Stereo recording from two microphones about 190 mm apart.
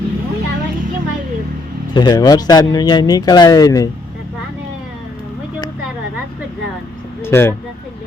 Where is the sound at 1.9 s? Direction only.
20° left (ahead or behind).